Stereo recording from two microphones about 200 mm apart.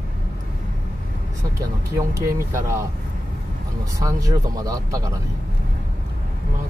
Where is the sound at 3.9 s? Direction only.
15° right (ahead or behind).